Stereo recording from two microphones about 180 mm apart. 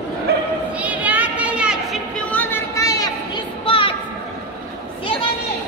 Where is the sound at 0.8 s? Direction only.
10° right (ahead or behind).